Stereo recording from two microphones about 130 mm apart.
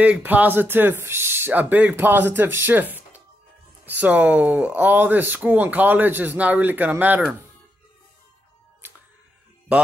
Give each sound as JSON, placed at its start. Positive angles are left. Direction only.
{"t": 0.0, "sound": "speech", "side_deg": -10}